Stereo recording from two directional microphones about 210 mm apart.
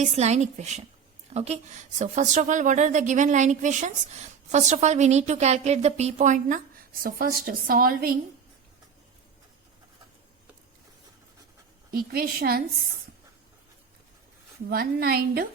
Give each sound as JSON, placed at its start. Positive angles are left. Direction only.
{"t": 0.0, "sound": "a woman's voice", "side_deg": -30}
{"t": 11.9, "sound": "a woman's voice", "side_deg": -45}
{"t": 14.7, "sound": "a woman's voice", "side_deg": -45}